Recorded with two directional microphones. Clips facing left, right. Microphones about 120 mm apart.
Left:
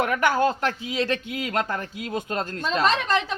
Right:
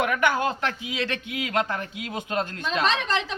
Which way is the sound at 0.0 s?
35° left (ahead or behind).